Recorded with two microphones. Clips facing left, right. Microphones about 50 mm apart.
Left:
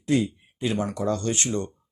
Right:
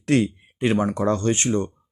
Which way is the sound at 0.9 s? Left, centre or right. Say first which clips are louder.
Right 5 dB; right.